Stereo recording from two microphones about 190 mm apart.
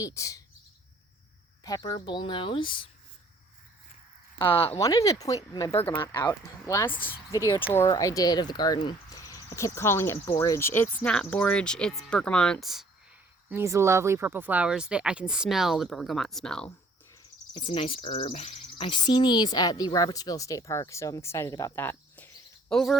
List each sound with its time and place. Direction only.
0.0 s speech: 15° left (ahead or behind)
1.6 s speech: 20° left (ahead or behind)
4.4 s speech: 25° left (ahead or behind); by 12.8 s centre (ahead or behind)
13.5 s speech: 15° right (ahead or behind); by 16.7 s 5° left (ahead or behind)
17.5 s speech: 30° left (ahead or behind); by 23.0 s centre (ahead or behind)